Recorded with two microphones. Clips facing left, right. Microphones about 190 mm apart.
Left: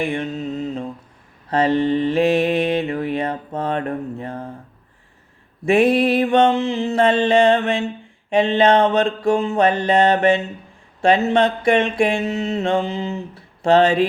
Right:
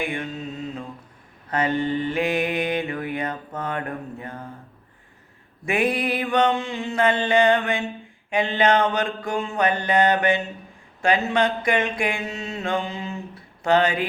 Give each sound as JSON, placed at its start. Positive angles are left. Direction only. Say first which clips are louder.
{"t": 0.0, "sound": "mantra", "louder": "left 5 dB", "side_deg": 25}
{"t": 1.5, "sound": "mantra", "louder": "left 6 dB", "side_deg": 30}
{"t": 5.6, "sound": "mantra", "louder": "left 8 dB", "side_deg": 25}